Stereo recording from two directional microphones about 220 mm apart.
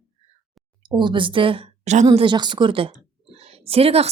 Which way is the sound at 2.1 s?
20° right (ahead or behind).